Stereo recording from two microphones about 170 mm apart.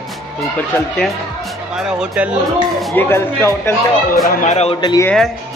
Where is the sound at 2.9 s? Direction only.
15° left (ahead or behind).